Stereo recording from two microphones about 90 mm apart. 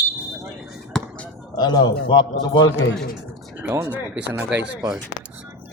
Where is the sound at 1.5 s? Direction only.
50° left (ahead or behind).